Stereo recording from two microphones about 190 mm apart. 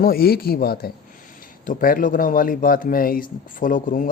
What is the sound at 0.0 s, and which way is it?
Speech, 50° left (ahead or behind).